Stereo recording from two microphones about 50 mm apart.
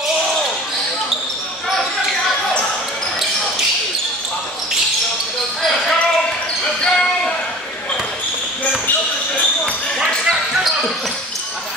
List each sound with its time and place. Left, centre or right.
6.8 s basketball bounce: centre